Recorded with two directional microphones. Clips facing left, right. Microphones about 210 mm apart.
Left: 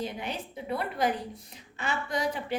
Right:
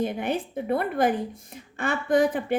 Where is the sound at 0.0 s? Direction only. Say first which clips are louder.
Right 8 dB; 55° right (ahead or behind).